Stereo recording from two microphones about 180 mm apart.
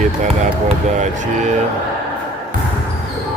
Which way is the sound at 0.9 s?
40° right (ahead or behind).